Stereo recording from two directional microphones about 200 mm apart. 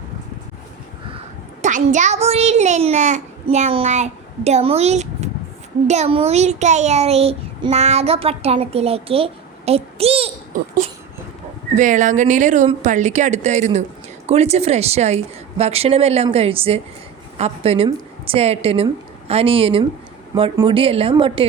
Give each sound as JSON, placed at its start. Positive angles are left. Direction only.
{"t": 1.6, "sound": "a child's voice", "side_deg": -35}